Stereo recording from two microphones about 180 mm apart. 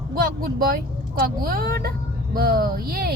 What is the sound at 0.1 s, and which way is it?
Speech, 55° right (ahead or behind).